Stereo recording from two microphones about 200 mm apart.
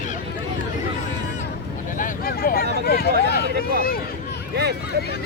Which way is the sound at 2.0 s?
45° left (ahead or behind).